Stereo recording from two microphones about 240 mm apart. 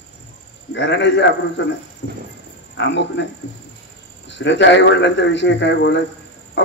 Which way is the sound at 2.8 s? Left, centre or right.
Left.